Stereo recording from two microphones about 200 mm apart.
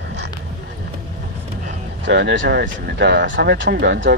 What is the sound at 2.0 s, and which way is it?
Speech, 60° right (ahead or behind).